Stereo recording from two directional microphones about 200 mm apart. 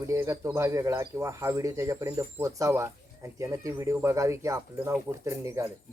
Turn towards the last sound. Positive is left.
turn(degrees=-15)  # may be behind; listen again after turning